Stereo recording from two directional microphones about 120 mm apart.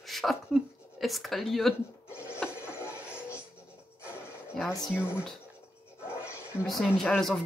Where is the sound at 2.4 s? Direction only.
20° left (ahead or behind).